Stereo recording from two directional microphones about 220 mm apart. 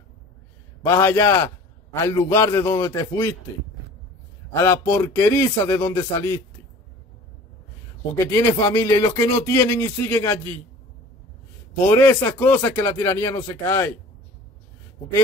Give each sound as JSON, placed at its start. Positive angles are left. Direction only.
{"t": 0.8, "sound": "speech", "side_deg": 15}
{"t": 4.5, "sound": "a man's voice", "side_deg": 15}
{"t": 8.3, "sound": "speech", "side_deg": 15}
{"t": 11.9, "sound": "speech", "side_deg": 10}